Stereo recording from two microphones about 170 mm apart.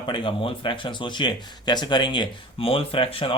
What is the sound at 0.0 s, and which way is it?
Speech, 30° left (ahead or behind).